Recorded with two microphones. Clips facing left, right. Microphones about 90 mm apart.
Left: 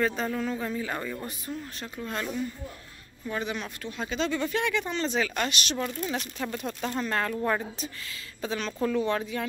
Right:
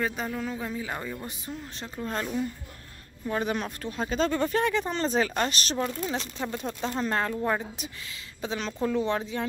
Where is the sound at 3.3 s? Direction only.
40° right (ahead or behind).